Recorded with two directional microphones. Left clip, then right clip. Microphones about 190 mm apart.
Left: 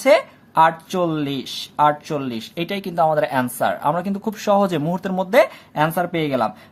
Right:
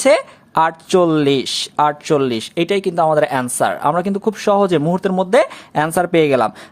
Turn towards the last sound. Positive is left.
turn(degrees=-45)  # may be behind; listen again after turning